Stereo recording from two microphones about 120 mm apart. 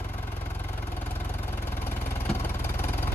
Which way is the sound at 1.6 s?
20° left (ahead or behind).